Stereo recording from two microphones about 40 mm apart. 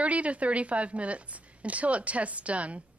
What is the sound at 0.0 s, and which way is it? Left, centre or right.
A woman's voice, right.